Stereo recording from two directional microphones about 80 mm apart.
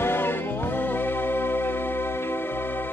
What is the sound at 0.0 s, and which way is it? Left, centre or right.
Music, left.